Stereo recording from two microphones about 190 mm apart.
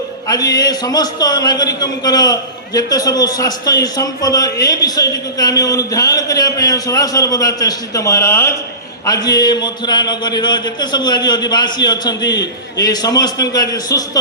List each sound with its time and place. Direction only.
0.3 s a man's voice: 20° left (ahead or behind)